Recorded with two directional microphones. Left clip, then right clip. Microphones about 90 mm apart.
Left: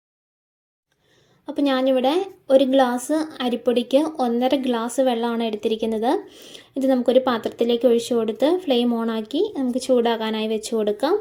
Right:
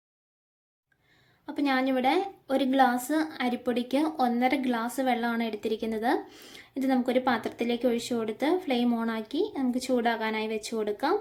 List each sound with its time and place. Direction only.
1.5 s a woman's voice: 30° left (ahead or behind)
6.2 s speech: 15° left (ahead or behind)
6.7 s a woman's voice: 30° left (ahead or behind)